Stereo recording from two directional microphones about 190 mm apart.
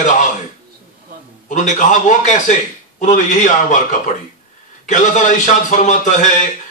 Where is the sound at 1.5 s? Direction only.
40° left (ahead or behind).